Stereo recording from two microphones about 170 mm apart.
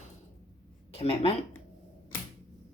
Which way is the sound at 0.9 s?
35° left (ahead or behind).